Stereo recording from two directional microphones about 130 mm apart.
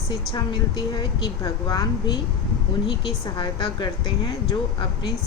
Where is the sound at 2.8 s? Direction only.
40° left (ahead or behind).